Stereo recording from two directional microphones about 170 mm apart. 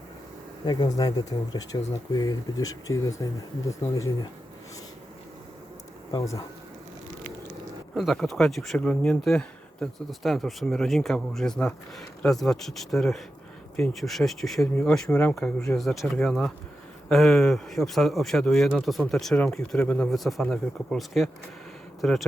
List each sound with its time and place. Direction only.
0.6 s speech: 25° left (ahead or behind)
6.1 s speech: 20° left (ahead or behind)
7.9 s a man's voice: centre (ahead or behind)